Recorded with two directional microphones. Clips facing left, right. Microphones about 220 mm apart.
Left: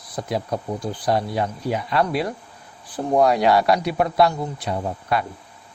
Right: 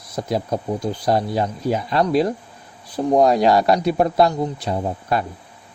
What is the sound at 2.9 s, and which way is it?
Speech, 20° right (ahead or behind).